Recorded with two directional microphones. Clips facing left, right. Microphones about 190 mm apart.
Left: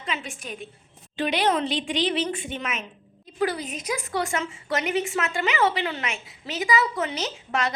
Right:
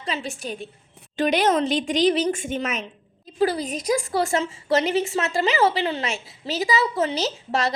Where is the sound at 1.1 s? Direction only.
45° right (ahead or behind).